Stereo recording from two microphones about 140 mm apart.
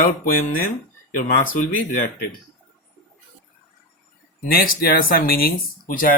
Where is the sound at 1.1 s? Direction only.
70° left (ahead or behind).